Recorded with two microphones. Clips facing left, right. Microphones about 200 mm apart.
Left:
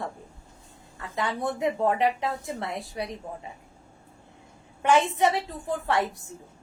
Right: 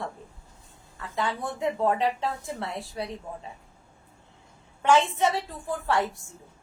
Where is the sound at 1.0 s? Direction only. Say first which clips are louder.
Left 1 dB; 20° left (ahead or behind).